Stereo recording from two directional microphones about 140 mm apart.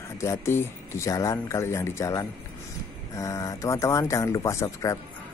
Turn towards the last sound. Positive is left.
turn(degrees=20)  # may be behind; listen again after turning